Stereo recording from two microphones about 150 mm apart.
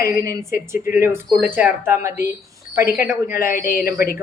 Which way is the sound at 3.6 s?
70° left (ahead or behind).